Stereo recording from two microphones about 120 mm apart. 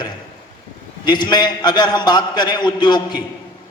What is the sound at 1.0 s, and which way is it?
A man's voice, 35° left (ahead or behind).